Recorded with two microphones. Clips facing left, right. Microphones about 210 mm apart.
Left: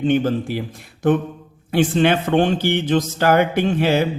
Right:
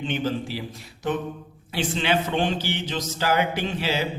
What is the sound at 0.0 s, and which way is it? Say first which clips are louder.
Speech: left 8 dB; 50° left (ahead or behind).